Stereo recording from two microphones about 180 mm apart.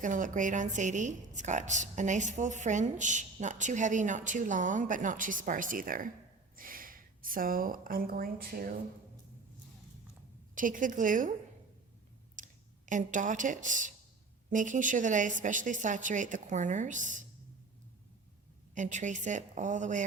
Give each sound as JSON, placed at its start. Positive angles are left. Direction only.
{"t": 0.0, "sound": "a woman's voice", "side_deg": -45}
{"t": 10.5, "sound": "a woman's voice", "side_deg": -50}
{"t": 12.4, "sound": "a woman's voice", "side_deg": -45}
{"t": 18.7, "sound": "a woman's voice", "side_deg": -45}